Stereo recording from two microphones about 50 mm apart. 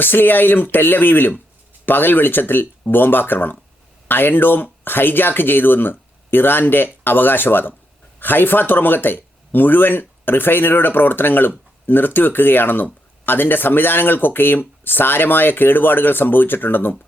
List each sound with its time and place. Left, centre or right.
0.0 s speech: left